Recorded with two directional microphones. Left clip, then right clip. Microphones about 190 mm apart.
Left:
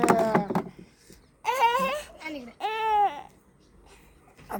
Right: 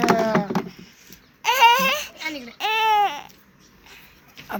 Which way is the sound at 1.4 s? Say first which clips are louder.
Right 8 dB; 20° left (ahead or behind).